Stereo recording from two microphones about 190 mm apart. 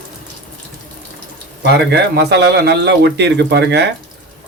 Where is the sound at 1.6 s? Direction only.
60° right (ahead or behind).